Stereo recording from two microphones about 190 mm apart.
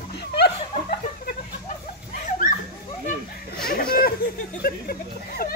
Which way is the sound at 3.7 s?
50° left (ahead or behind).